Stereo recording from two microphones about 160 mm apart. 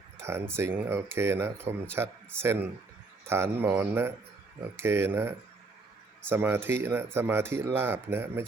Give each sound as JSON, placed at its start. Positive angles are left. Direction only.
{"t": 0.2, "sound": "speech", "side_deg": -15}